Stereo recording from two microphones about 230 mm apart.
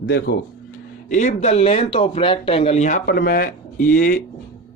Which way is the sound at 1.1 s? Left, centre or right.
Left.